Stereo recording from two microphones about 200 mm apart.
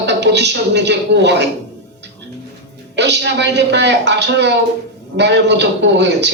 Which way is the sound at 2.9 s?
60° right (ahead or behind).